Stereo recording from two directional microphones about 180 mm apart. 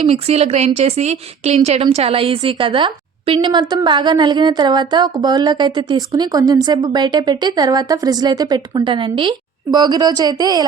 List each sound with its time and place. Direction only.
0.0 s a woman's voice: 35° right (ahead or behind)